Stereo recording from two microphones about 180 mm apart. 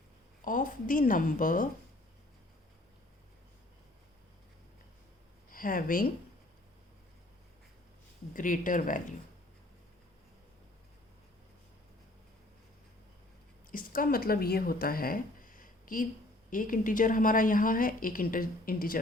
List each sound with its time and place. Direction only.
0.4 s a woman's voice: 45° left (ahead or behind)
5.5 s speech: 50° left (ahead or behind)
8.3 s a woman's voice: 50° left (ahead or behind)
13.7 s a woman's voice: 50° left (ahead or behind)